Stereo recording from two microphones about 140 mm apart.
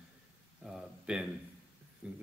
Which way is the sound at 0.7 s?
5° right (ahead or behind).